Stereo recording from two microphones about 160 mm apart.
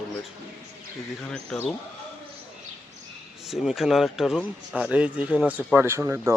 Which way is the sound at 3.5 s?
Centre (ahead or behind).